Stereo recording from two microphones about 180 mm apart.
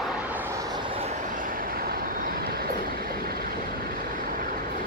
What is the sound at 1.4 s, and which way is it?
Train, 50° right (ahead or behind).